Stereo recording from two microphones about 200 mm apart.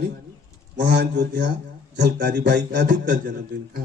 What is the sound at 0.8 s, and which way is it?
A man's voice, 55° right (ahead or behind).